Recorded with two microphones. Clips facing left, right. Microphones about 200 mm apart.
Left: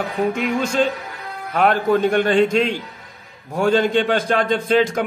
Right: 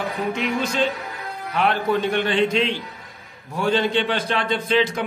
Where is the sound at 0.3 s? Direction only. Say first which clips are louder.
Left 3 dB; 50° left (ahead or behind).